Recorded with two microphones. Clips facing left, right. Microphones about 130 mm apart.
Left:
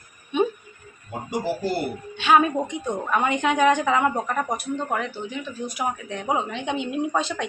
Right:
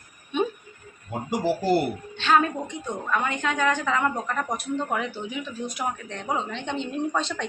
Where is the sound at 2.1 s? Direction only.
10° left (ahead or behind).